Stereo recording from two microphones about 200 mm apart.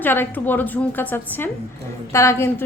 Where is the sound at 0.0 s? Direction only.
10° left (ahead or behind).